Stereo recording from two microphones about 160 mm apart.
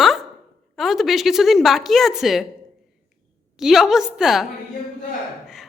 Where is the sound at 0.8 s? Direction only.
Centre (ahead or behind).